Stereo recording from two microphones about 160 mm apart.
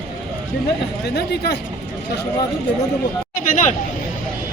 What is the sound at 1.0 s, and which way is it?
Speech, 90° left.